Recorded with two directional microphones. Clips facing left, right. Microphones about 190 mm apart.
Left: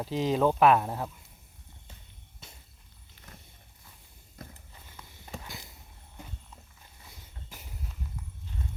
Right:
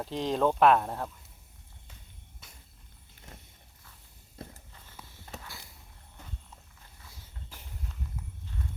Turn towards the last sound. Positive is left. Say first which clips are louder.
# left 1 dB
turn(degrees=10)  # may be behind; listen again after turning